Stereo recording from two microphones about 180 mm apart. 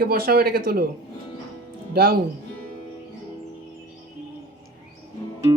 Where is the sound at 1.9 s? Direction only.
55° right (ahead or behind).